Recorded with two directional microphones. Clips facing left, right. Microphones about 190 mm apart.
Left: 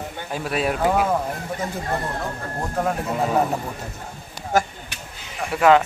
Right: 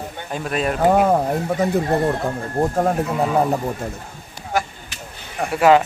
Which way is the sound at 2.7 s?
35° right (ahead or behind).